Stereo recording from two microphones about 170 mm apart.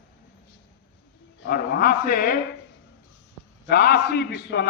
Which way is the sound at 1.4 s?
60° left (ahead or behind).